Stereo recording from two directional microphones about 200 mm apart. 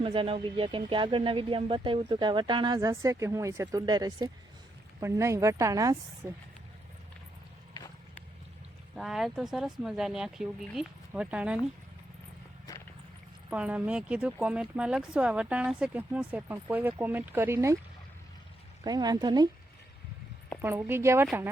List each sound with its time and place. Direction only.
0.0 s speech: 25° right (ahead or behind)
9.0 s speech: centre (ahead or behind)
12.7 s vehicle: 20° left (ahead or behind)
13.5 s speech: 5° right (ahead or behind)
18.9 s speech: 20° right (ahead or behind)
20.6 s speech: 10° right (ahead or behind)